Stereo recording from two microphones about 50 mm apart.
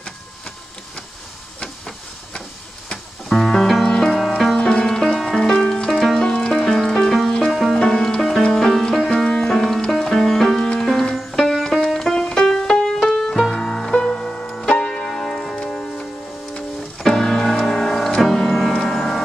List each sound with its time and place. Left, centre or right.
1.6 s printer: centre
3.3 s music: centre
4.6 s music: centre
4.8 s music: centre